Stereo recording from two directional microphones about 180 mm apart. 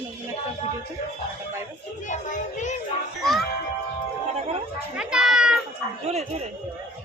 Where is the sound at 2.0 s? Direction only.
45° left (ahead or behind).